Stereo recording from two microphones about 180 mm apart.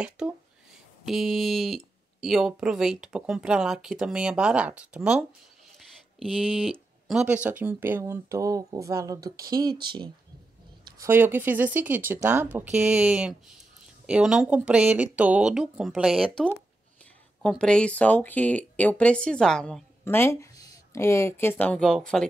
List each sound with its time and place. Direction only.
0.2 s speech: 5° right (ahead or behind)
10.8 s a sound: 25° right (ahead or behind)
11.1 s speech: 10° right (ahead or behind)